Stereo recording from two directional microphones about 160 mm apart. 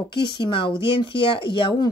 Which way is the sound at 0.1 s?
30° left (ahead or behind).